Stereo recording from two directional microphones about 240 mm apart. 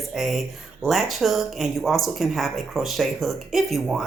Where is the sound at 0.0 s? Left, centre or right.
Centre.